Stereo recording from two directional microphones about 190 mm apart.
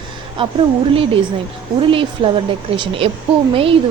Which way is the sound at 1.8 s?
25° right (ahead or behind).